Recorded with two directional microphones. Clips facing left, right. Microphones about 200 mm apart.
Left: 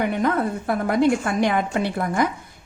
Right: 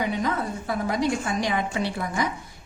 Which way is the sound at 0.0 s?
55° left (ahead or behind).